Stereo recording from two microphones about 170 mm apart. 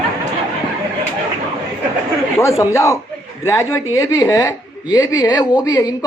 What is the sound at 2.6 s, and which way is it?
A man's voice, 20° left (ahead or behind).